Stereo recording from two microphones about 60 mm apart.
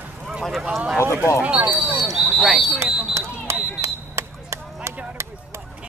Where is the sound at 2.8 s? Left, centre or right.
Right.